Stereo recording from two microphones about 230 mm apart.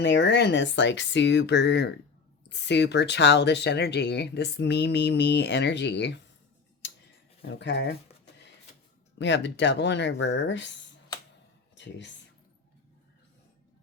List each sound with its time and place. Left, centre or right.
0.0 s speech: left
7.6 s speech: left
9.1 s speech: left
11.7 s speech: left